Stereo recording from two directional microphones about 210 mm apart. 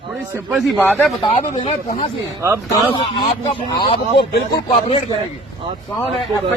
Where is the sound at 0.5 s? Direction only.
Centre (ahead or behind).